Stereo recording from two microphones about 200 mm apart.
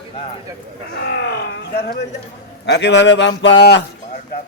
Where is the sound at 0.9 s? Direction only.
55° left (ahead or behind).